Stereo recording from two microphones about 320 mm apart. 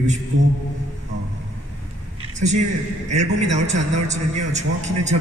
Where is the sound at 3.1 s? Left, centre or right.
Right.